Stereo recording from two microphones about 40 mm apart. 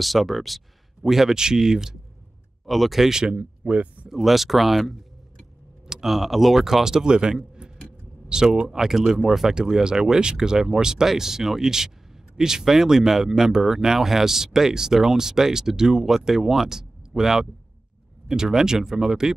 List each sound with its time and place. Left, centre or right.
0.0 s speech: centre
2.6 s speech: centre
3.2 s speech: right
4.1 s speech: centre
6.0 s speech: centre